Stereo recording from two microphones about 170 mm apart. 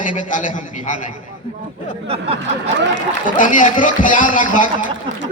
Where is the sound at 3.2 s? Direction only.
50° left (ahead or behind).